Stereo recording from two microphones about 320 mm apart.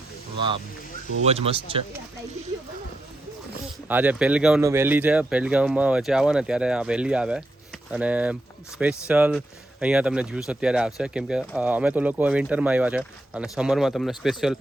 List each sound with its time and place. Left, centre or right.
1.2 s speech: centre
3.8 s speech: centre